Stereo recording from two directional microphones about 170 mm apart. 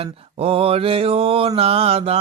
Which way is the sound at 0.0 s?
35° right (ahead or behind).